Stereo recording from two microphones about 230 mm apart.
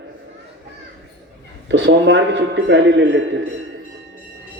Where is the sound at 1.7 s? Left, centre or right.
Right.